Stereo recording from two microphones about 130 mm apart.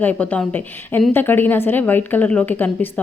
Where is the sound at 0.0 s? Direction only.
10° left (ahead or behind).